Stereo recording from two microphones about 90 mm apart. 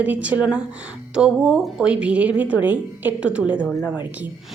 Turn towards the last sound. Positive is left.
turn(degrees=-15)  # may be behind; listen again after turning